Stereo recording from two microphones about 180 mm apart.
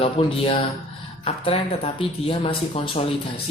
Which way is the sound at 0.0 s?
30° left (ahead or behind).